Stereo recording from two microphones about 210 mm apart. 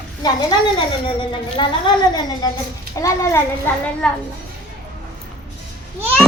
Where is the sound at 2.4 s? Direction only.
20° left (ahead or behind).